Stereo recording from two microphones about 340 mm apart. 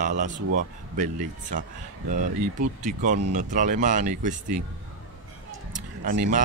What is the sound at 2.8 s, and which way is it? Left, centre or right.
Speech, right.